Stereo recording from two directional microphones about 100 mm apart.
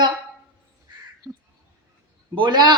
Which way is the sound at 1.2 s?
35° right (ahead or behind).